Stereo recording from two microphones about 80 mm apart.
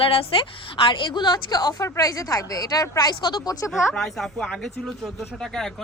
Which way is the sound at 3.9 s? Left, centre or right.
Centre.